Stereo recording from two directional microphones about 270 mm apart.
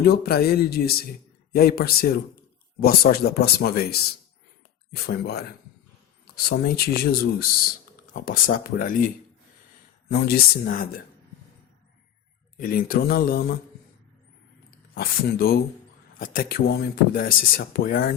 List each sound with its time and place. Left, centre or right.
0.0 s speech: left
12.5 s speech: left
14.9 s speech: left